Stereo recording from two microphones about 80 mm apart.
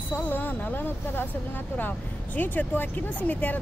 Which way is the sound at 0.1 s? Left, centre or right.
Left.